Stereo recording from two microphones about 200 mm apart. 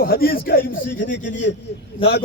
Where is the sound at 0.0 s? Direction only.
50° left (ahead or behind).